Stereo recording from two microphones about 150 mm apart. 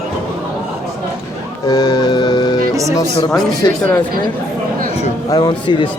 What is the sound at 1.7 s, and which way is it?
Music, 25° left (ahead or behind).